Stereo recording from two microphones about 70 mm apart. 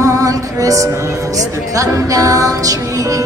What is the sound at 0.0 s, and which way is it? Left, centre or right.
Music, right.